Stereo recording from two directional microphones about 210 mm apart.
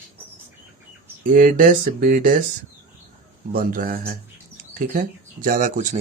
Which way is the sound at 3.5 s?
40° right (ahead or behind).